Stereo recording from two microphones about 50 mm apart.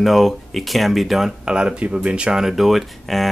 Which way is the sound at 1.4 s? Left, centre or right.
Centre.